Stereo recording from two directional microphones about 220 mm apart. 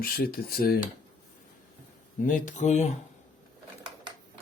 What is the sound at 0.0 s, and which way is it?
Speech, 45° left (ahead or behind).